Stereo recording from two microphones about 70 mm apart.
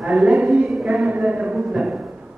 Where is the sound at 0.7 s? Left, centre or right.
Centre.